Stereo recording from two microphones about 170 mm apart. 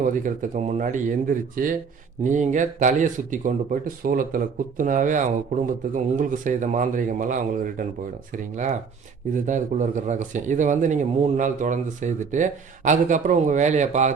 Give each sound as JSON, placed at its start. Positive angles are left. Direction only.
{"t": 0.0, "sound": "speech", "side_deg": -50}